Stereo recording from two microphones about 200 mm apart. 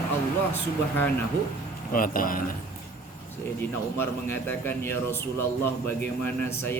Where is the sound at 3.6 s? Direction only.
10° left (ahead or behind).